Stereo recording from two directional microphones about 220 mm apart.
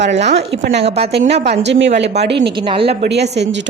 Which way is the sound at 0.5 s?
50° right (ahead or behind).